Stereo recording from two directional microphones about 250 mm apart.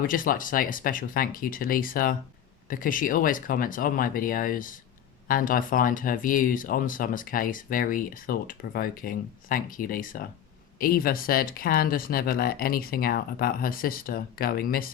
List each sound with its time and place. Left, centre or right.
0.1 s speech: left